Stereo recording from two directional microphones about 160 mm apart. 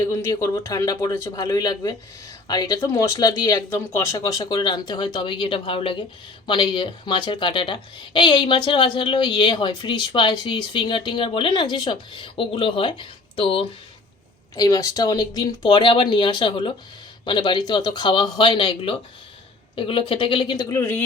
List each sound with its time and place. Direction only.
0.1 s a woman's voice: 15° left (ahead or behind); by 13.7 s 35° left (ahead or behind)
14.5 s a woman's voice: 20° left (ahead or behind)
20.7 s speech: 15° left (ahead or behind)